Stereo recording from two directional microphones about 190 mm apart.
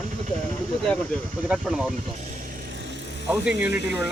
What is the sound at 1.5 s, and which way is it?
Speech, 5° right (ahead or behind).